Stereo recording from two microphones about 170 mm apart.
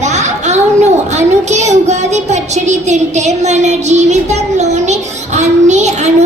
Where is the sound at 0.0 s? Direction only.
45° right (ahead or behind).